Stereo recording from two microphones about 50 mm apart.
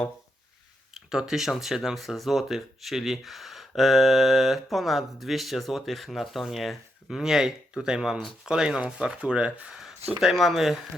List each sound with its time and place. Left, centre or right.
0.9 s speech: centre
10.2 s speech: centre